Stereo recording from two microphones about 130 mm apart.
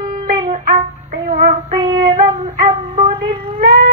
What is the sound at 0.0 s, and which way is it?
Music, 40° right (ahead or behind).